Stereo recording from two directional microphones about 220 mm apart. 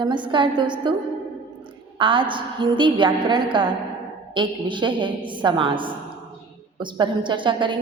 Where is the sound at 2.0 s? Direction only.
20° right (ahead or behind).